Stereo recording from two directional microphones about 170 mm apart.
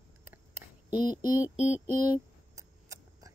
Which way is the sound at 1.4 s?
10° right (ahead or behind).